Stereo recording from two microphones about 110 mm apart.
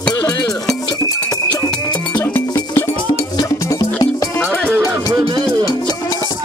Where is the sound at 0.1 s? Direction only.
35° left (ahead or behind).